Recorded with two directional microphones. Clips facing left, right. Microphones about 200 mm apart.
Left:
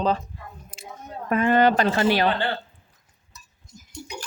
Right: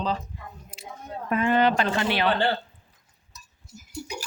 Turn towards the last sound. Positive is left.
turn(degrees=-10)  # may be behind; listen again after turning